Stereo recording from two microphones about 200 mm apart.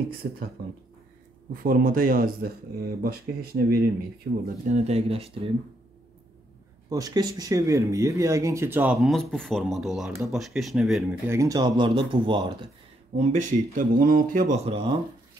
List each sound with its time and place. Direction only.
1.5 s speech: 45° right (ahead or behind); by 5.5 s 30° right (ahead or behind)
6.9 s speech: 20° right (ahead or behind); by 11.1 s centre (ahead or behind)
11.2 s speech: 15° right (ahead or behind)
13.1 s speech: 35° right (ahead or behind)